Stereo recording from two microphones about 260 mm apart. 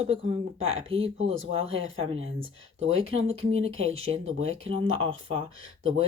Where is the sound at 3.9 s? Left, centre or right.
Right.